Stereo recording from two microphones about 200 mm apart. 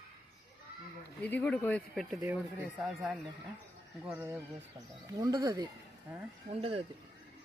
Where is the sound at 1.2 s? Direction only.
5° left (ahead or behind).